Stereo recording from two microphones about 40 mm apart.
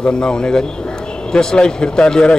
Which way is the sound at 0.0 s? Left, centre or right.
Centre.